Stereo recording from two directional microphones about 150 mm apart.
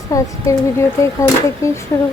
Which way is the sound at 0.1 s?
20° left (ahead or behind).